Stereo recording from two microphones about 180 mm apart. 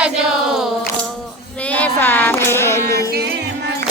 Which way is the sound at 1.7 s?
10° left (ahead or behind).